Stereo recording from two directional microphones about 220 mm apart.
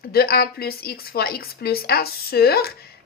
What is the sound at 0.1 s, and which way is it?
A woman's voice, 45° left (ahead or behind).